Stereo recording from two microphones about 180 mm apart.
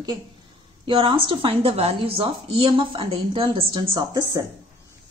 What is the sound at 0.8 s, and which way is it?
A woman's voice, 30° right (ahead or behind).